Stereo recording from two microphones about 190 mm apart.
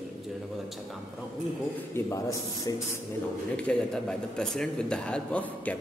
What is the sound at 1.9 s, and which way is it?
Speech, 15° left (ahead or behind).